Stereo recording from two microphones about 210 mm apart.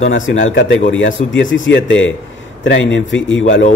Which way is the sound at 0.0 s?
65° left (ahead or behind).